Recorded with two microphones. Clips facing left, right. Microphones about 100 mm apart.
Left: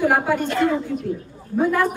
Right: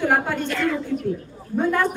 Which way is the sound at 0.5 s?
25° left (ahead or behind).